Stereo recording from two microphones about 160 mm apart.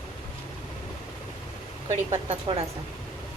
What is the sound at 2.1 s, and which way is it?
Speech, 40° right (ahead or behind).